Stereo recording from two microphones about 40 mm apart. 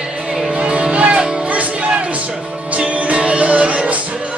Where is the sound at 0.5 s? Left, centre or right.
Right.